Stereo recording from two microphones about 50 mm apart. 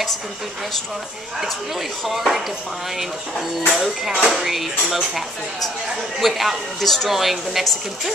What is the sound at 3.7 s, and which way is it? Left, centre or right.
A woman's voice, centre.